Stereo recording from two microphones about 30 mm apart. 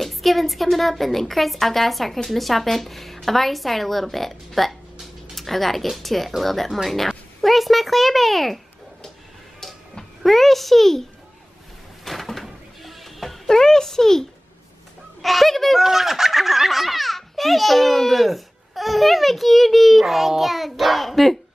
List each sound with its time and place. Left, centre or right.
0.0 s a child's voice: centre
10.2 s a child's voice: centre
12.0 s music: centre
13.5 s speech: centre
15.2 s a child's voice: centre
15.8 s a child's voice: centre